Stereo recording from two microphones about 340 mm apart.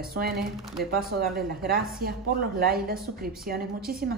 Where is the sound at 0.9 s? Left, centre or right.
Right.